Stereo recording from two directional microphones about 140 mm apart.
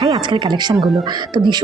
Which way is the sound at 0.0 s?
35° right (ahead or behind).